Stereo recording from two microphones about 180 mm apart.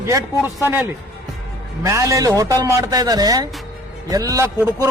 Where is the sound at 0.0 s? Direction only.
15° right (ahead or behind).